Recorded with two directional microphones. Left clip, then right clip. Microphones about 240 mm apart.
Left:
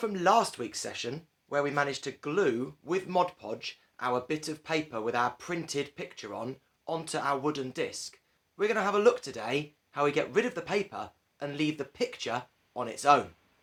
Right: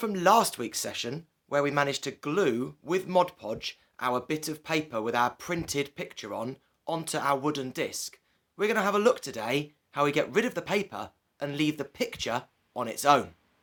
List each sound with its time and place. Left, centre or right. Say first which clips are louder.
0.0 s speech: right 3 dB; right